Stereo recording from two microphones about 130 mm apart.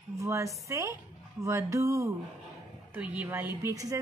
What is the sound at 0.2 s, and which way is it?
A woman's voice, 25° right (ahead or behind).